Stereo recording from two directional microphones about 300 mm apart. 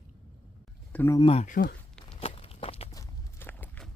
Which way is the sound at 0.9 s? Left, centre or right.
Centre.